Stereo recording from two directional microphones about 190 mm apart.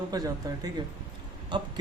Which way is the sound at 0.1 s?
20° right (ahead or behind).